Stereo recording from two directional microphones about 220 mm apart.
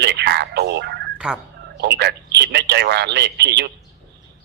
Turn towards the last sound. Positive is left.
turn(degrees=-50)  # may be behind; listen again after turning